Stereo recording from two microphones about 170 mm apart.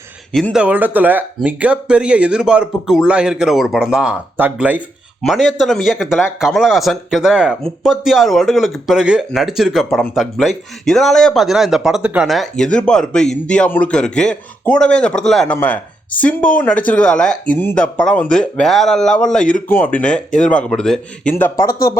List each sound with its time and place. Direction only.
0.5 s speech: 10° right (ahead or behind); by 21.6 s 10° left (ahead or behind)
21.6 s speech: 55° left (ahead or behind)